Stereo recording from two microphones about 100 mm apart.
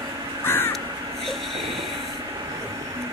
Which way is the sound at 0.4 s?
25° left (ahead or behind).